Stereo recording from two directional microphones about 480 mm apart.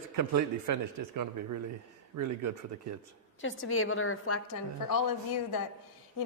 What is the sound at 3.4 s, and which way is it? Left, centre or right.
A woman's voice, left.